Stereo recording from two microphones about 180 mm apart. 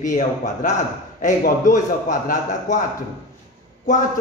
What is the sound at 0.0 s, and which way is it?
A man's voice, 45° left (ahead or behind).